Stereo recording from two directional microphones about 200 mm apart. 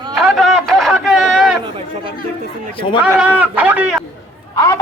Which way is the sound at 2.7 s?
25° left (ahead or behind).